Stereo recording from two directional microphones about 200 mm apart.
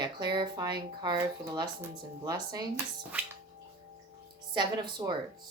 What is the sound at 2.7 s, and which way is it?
Speech, 5° right (ahead or behind).